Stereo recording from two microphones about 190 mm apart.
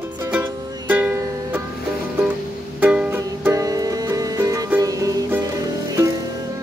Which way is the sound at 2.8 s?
10° right (ahead or behind).